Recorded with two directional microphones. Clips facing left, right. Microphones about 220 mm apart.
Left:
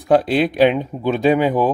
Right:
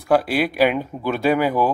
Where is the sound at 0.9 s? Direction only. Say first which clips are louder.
Left 3 dB; 20° left (ahead or behind).